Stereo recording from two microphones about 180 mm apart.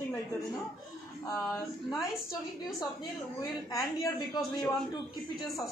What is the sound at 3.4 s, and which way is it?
A woman's voice, 20° left (ahead or behind).